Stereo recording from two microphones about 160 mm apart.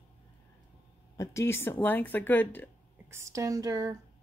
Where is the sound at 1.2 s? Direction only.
15° left (ahead or behind).